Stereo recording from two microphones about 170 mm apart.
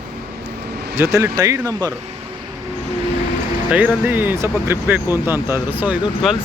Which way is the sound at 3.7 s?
10° right (ahead or behind).